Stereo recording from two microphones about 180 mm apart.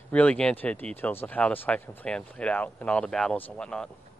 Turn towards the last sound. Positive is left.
turn(degrees=5)  # may be behind; listen again after turning